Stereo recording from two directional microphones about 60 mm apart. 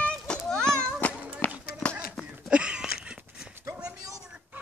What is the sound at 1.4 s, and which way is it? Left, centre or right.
Run, left.